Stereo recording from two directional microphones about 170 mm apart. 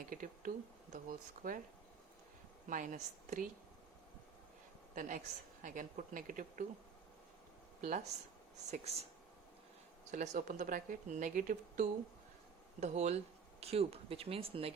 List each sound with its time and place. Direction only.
0.1 s speech: 50° right (ahead or behind)
2.6 s speech: 50° right (ahead or behind)
4.9 s speech: 50° right (ahead or behind)
7.8 s speech: 45° right (ahead or behind)
10.1 s speech: 50° right (ahead or behind); by 14.7 s 35° right (ahead or behind)